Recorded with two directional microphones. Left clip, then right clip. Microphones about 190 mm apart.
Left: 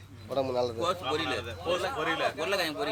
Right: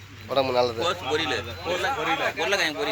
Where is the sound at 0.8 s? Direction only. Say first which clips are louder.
Right 4 dB; 30° left (ahead or behind).